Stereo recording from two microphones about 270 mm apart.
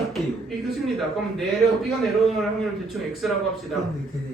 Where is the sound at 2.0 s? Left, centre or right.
Centre.